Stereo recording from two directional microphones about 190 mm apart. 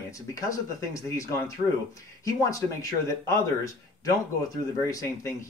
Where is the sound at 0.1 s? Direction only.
15° left (ahead or behind).